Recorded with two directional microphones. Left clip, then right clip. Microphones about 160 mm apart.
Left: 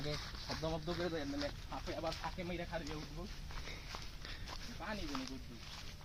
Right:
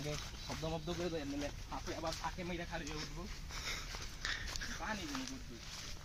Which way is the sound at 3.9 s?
5° right (ahead or behind).